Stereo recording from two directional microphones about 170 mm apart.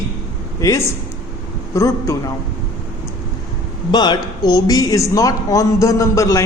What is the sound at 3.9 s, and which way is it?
Speech, 25° left (ahead or behind).